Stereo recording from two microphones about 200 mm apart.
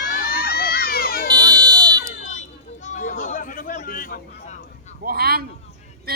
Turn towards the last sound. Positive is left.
turn(degrees=-50)  # may be behind; listen again after turning